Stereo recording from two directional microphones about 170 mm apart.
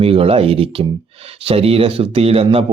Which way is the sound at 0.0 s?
35° right (ahead or behind).